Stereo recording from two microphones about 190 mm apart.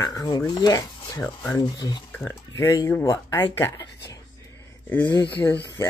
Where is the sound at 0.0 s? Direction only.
20° left (ahead or behind).